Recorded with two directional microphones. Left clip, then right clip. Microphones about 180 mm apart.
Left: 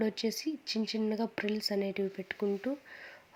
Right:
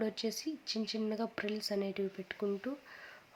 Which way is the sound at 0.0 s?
15° left (ahead or behind).